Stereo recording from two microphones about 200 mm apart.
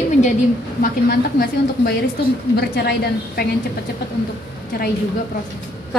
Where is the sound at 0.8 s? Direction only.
50° left (ahead or behind).